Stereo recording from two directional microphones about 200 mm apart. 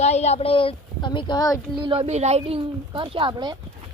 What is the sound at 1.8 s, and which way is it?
Speech, 25° right (ahead or behind).